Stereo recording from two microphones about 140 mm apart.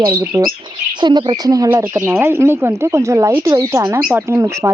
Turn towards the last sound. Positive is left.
turn(degrees=-20)  # may be behind; listen again after turning